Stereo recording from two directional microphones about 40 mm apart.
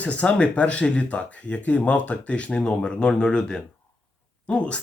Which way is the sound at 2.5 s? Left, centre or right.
Left.